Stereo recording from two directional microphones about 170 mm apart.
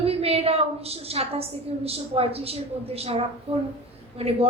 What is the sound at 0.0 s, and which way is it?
A woman's voice, 35° right (ahead or behind).